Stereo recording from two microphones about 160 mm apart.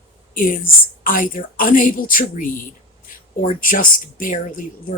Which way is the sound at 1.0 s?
55° left (ahead or behind).